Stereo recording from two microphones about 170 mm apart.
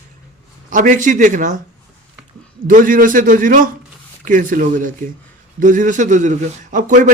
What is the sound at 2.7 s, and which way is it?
A man's voice, 55° right (ahead or behind).